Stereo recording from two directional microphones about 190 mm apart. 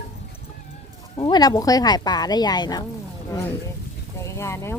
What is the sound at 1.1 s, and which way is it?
Speech, 20° left (ahead or behind).